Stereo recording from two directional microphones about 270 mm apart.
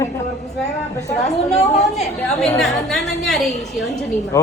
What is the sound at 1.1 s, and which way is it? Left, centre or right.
A woman's voice, left.